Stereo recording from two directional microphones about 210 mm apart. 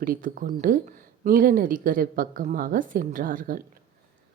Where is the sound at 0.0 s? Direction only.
40° right (ahead or behind).